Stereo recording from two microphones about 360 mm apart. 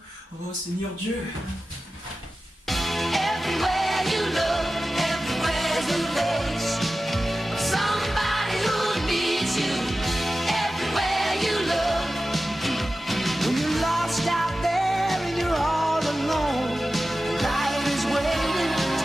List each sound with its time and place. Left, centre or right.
2.6 s music: centre